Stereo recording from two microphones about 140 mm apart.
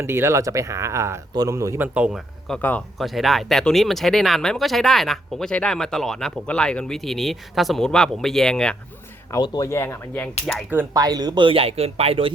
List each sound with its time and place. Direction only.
0.0 s speech: 20° right (ahead or behind)
1.9 s speech: 5° right (ahead or behind)
2.5 s speech: 10° left (ahead or behind)
3.0 s speech: centre (ahead or behind)
9.3 s speech: 30° left (ahead or behind)
9.6 s speech: 20° left (ahead or behind)
10.5 s speech: 5° left (ahead or behind)
10.9 s speech: 25° right (ahead or behind); by 12.3 s 45° right (ahead or behind)